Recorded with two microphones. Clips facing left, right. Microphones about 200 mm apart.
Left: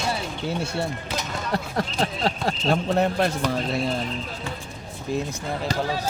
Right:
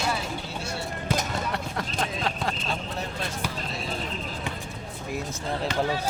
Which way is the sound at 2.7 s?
60° left (ahead or behind).